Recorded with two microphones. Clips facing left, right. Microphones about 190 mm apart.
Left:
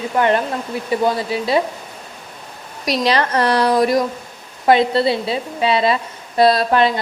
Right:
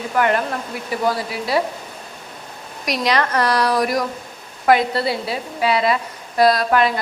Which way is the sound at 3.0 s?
30° left (ahead or behind).